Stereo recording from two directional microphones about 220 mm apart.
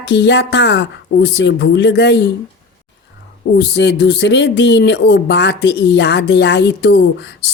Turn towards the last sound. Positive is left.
turn(degrees=50)  # may be behind; listen again after turning